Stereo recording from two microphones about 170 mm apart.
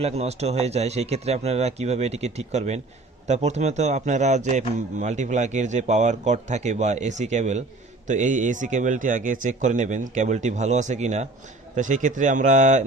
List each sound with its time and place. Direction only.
0.0 s speech: 40° right (ahead or behind)